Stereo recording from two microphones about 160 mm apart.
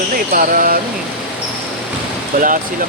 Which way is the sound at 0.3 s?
65° right (ahead or behind).